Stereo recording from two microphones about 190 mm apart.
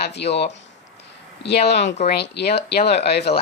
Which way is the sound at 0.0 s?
60° left (ahead or behind).